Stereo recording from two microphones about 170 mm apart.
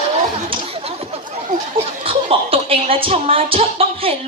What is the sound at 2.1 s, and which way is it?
Chuckle, 35° right (ahead or behind).